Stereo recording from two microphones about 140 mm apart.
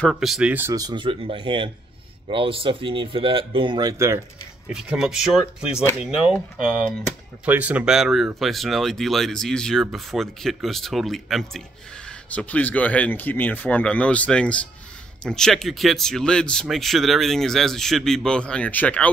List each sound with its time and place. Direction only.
0.1 s speech: 5° right (ahead or behind)
0.7 s speech: 30° right (ahead or behind)
4.6 s speech: 5° right (ahead or behind)
7.4 s speech: 10° right (ahead or behind); by 19.0 s 10° left (ahead or behind)